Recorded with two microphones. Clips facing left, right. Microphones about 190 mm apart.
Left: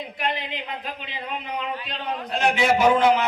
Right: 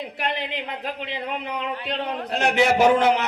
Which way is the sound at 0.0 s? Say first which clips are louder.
Right 1 dB; 65° right (ahead or behind).